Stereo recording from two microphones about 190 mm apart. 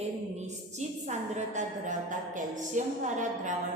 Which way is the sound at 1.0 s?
40° right (ahead or behind).